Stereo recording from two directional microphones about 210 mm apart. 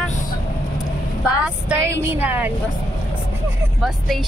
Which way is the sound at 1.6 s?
10° right (ahead or behind).